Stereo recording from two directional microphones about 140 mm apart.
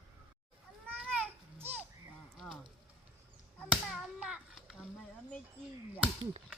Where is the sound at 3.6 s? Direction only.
5° right (ahead or behind).